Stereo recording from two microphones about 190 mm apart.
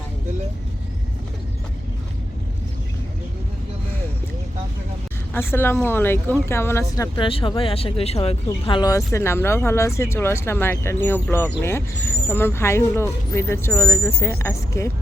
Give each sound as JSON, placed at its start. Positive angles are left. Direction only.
{"t": 5.3, "sound": "speech", "side_deg": 10}
{"t": 7.3, "sound": "speech", "side_deg": 30}
{"t": 8.6, "sound": "speech", "side_deg": 20}